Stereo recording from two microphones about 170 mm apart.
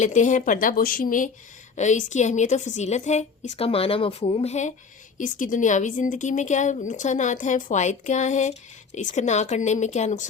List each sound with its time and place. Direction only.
0.0 s speech: 45° left (ahead or behind)
5.1 s speech: 50° left (ahead or behind)